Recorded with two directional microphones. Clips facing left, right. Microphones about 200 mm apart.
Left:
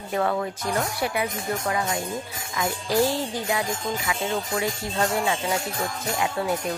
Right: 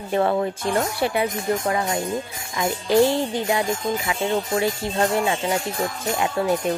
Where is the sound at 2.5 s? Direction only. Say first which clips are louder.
Right 5 dB; 25° right (ahead or behind).